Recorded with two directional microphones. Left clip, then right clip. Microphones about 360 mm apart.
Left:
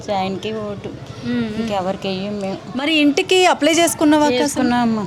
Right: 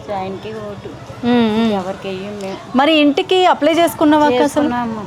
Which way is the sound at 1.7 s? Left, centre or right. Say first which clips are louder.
Left 1 dB; left.